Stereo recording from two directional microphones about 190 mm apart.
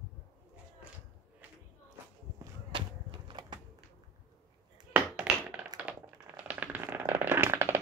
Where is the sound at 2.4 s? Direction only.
25° right (ahead or behind).